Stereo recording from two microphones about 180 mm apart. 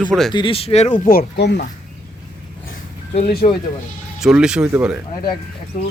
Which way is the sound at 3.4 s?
40° left (ahead or behind).